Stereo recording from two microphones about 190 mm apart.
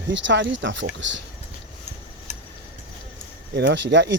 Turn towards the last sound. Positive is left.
turn(degrees=-70)  # may be behind; listen again after turning